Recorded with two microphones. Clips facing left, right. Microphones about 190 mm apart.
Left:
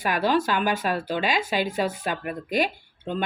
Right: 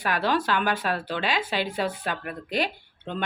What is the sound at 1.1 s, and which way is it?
Speech, 10° left (ahead or behind).